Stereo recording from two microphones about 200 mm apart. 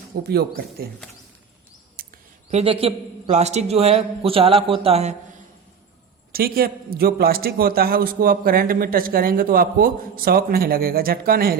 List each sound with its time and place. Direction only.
0.3 s a man's voice: 50° right (ahead or behind)
2.5 s a woman's voice: 30° right (ahead or behind)
6.3 s a man's voice: 50° right (ahead or behind)